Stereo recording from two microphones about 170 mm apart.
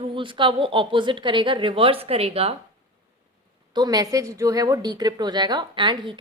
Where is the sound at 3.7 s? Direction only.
25° right (ahead or behind).